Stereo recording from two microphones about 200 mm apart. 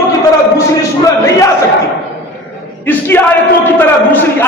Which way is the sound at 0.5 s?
15° left (ahead or behind).